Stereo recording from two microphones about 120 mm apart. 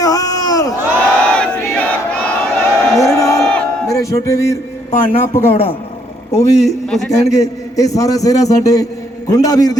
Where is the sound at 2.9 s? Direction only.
25° left (ahead or behind).